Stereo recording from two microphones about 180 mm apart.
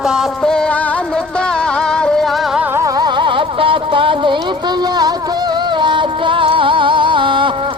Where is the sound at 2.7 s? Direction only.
25° right (ahead or behind).